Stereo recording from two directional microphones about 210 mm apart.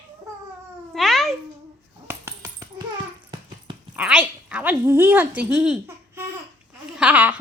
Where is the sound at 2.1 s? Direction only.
15° right (ahead or behind).